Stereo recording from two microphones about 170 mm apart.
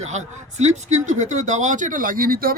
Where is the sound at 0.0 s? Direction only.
45° right (ahead or behind).